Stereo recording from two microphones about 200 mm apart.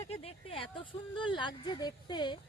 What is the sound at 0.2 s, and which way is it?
Speech, 30° left (ahead or behind).